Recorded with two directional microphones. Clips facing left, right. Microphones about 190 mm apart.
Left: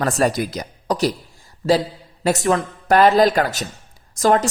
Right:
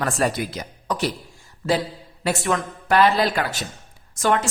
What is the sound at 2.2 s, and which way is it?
A woman's voice, 40° left (ahead or behind).